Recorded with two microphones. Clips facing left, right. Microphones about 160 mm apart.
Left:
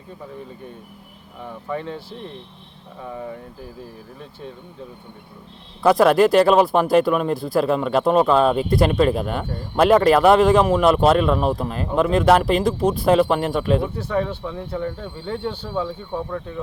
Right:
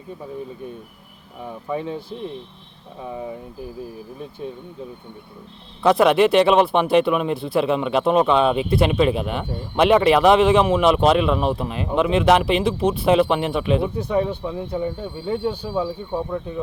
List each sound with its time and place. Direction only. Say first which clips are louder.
1.5 s speech: right 2 dB; 15° right (ahead or behind)
5.8 s a man's voice: left 1 dB; centre (ahead or behind)
14.0 s speech: right 2 dB; 15° right (ahead or behind)